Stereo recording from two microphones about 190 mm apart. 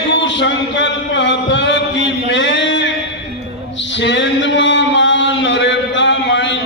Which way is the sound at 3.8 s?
70° left (ahead or behind).